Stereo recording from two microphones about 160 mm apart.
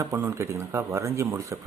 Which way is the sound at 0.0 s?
15° right (ahead or behind).